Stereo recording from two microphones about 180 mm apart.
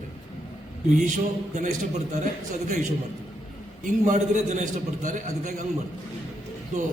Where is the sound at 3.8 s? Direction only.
45° right (ahead or behind).